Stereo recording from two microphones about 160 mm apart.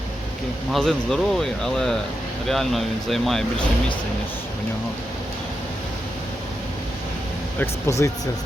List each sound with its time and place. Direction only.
0.7 s speech: 5° left (ahead or behind)
7.6 s speech: 20° left (ahead or behind)